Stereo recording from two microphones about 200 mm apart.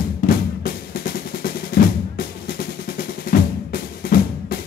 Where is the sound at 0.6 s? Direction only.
50° left (ahead or behind).